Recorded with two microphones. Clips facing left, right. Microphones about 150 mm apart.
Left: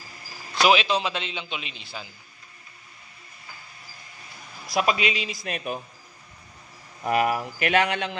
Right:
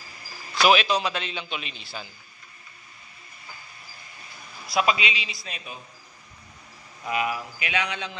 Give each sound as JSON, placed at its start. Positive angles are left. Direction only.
{"t": 0.6, "sound": "speech", "side_deg": 20}
{"t": 4.7, "sound": "speech", "side_deg": 45}
{"t": 7.1, "sound": "speech", "side_deg": 55}